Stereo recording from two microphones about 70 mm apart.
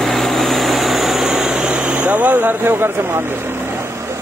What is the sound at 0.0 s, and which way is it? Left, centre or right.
Vehicle, centre.